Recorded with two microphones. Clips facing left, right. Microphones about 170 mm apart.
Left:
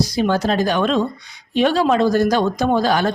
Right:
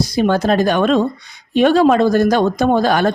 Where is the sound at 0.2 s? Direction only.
55° right (ahead or behind).